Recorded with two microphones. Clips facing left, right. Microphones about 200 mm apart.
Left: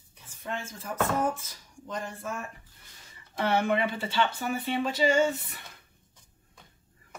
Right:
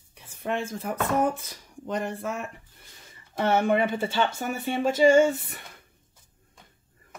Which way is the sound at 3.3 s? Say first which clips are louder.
Right 4 dB; 50° right (ahead or behind).